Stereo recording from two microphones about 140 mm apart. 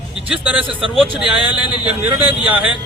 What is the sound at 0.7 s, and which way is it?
Speech, 40° right (ahead or behind).